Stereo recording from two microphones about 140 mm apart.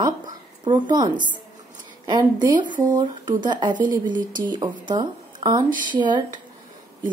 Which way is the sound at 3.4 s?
35° right (ahead or behind).